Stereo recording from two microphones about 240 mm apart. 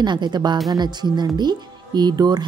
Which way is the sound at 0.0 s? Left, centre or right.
Centre.